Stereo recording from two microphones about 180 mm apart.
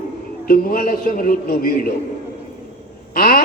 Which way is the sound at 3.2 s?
55° left (ahead or behind).